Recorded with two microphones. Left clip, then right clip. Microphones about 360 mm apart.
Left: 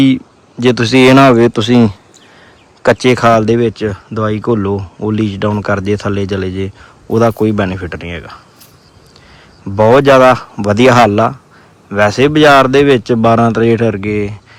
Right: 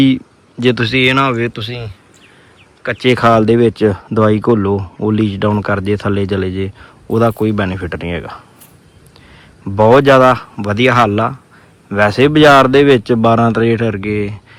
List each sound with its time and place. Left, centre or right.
0.6 s speech: centre
9.6 s speech: centre